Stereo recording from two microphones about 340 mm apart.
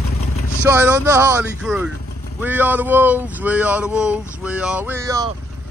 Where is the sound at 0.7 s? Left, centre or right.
Centre.